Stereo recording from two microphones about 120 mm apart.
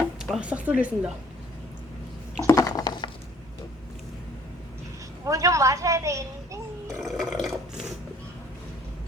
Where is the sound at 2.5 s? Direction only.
30° left (ahead or behind).